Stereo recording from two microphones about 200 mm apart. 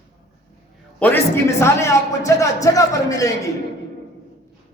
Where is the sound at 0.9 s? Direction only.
10° left (ahead or behind).